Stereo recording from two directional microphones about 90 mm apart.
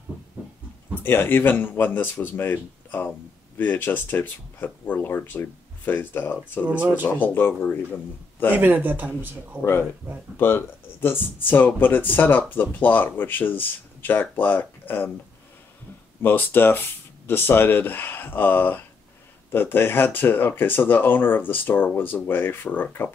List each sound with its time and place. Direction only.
1.0 s speech: 25° left (ahead or behind)
8.5 s speech: 20° right (ahead or behind)
9.6 s speech: 25° left (ahead or behind)
16.2 s speech: 20° left (ahead or behind)